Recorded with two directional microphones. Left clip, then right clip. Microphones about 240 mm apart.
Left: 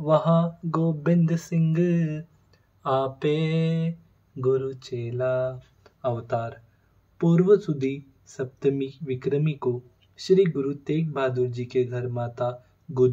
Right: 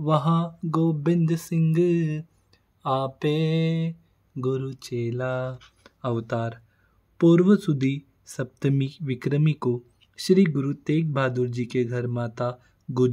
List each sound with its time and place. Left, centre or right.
0.0 s speech: right